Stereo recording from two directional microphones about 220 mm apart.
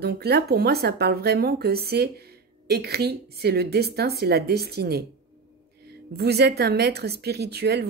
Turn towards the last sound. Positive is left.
turn(degrees=-45)  # may be behind; listen again after turning